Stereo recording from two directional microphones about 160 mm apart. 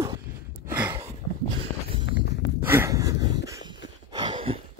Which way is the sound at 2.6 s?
15° right (ahead or behind).